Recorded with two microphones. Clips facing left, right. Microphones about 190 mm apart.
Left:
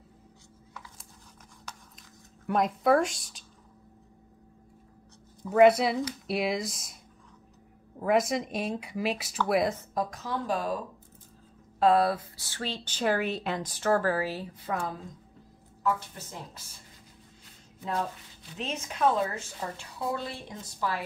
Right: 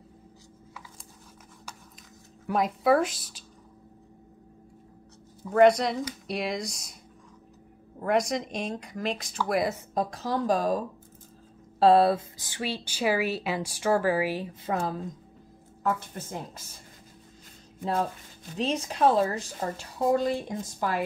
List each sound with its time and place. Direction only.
1.7 s a sound: 10° right (ahead or behind)
2.4 s speech: centre (ahead or behind)
5.5 s speech: 5° left (ahead or behind)
8.0 s speech: 5° left (ahead or behind)
9.9 s speech: 35° right (ahead or behind)
11.8 s speech: 30° right (ahead or behind)
15.8 s a woman's voice: 50° right (ahead or behind)
17.8 s speech: 40° right (ahead or behind)